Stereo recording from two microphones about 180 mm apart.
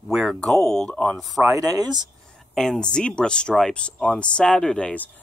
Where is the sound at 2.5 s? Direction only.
Centre (ahead or behind).